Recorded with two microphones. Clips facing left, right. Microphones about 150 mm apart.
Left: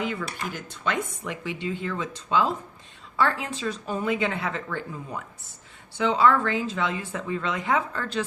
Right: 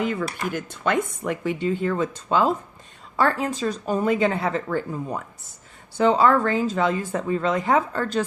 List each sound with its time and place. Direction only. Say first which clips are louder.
0.0 s speech: right 5 dB; 45° right (ahead or behind)